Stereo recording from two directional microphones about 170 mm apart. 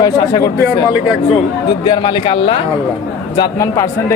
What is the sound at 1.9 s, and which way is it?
Speech, 30° left (ahead or behind).